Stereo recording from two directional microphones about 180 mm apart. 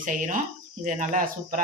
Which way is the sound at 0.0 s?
45° right (ahead or behind).